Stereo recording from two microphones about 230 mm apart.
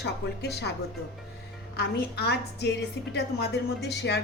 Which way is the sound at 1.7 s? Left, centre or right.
Left.